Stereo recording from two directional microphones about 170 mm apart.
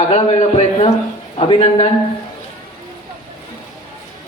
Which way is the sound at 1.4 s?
35° left (ahead or behind).